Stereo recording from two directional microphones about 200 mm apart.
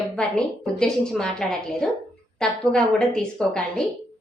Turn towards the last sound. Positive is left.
turn(degrees=5)  # may be behind; listen again after turning